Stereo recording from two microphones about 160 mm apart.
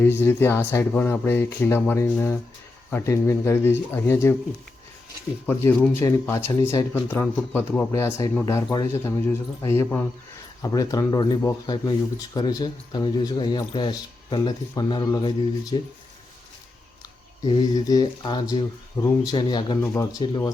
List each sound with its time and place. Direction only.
0.0 s speech: 15° left (ahead or behind)
5.5 s speech: 15° left (ahead or behind)
6.9 s speech: 15° left (ahead or behind)
17.4 s speech: 25° left (ahead or behind)
19.8 s speech: 20° left (ahead or behind)